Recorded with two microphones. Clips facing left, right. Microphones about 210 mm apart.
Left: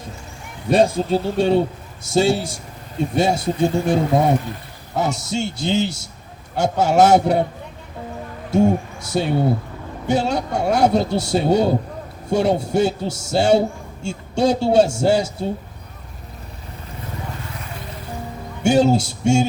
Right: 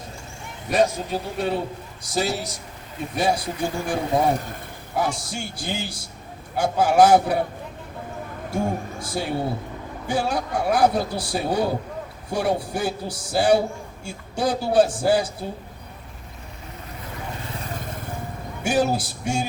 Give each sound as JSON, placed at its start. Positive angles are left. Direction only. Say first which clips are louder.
{"t": 0.7, "sound": "a man's voice", "louder": "left 5 dB", "side_deg": 30}
{"t": 8.5, "sound": "a man's voice", "louder": "left 9 dB", "side_deg": 25}
{"t": 17.7, "sound": "vehicle", "louder": "right 1 dB", "side_deg": -50}
{"t": 18.6, "sound": "a man's voice", "louder": "left 6 dB", "side_deg": 25}